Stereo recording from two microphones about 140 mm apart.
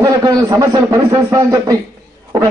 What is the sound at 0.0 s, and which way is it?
A man's voice, 25° right (ahead or behind).